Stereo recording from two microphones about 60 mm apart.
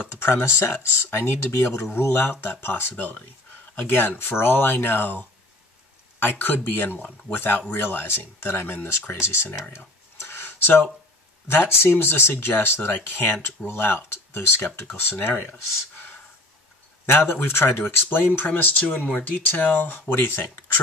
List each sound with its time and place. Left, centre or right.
0.1 s speech: left
10.1 s a sound: left
11.4 s speech: left
17.0 s speech: left